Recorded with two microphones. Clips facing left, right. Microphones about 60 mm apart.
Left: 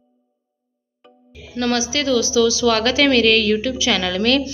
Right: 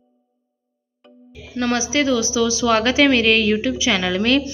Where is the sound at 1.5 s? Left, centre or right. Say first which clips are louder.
Even; centre.